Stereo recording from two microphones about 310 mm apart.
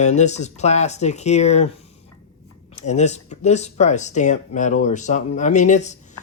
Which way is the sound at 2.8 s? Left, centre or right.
Left.